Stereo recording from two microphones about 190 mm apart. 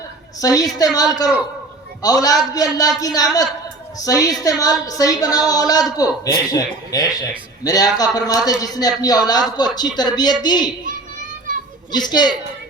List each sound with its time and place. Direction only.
0.3 s speech: 20° left (ahead or behind)
11.9 s speech: 20° left (ahead or behind)